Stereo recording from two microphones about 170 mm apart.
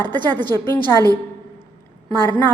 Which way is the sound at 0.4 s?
25° right (ahead or behind).